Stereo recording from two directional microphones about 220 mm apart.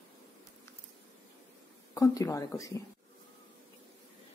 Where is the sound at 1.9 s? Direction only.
15° left (ahead or behind).